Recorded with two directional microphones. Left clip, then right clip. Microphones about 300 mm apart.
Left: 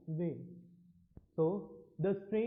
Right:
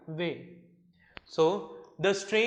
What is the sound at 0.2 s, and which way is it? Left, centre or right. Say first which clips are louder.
Speech: right 7 dB; centre.